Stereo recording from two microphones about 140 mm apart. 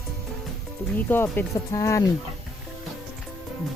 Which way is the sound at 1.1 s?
15° left (ahead or behind).